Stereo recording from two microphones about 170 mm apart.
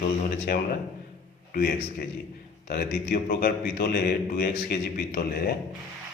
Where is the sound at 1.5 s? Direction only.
65° left (ahead or behind).